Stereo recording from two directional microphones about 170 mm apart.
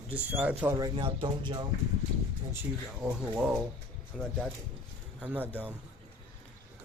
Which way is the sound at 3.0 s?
5° right (ahead or behind).